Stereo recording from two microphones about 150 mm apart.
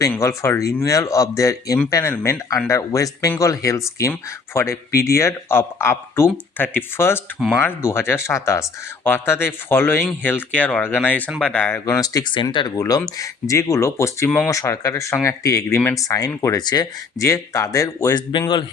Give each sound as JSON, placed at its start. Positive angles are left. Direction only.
{"t": 0.1, "sound": "speech", "side_deg": 20}